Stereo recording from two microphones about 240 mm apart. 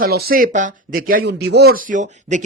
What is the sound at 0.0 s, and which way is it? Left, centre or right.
Speech, right.